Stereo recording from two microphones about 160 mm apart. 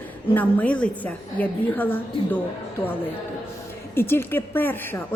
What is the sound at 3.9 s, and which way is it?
A woman's voice, 15° left (ahead or behind).